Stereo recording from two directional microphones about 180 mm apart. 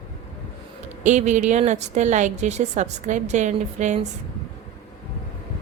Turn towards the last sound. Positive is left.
turn(degrees=-40)  # may be behind; listen again after turning